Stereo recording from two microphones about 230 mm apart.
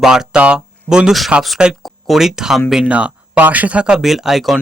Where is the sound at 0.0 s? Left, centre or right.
Centre.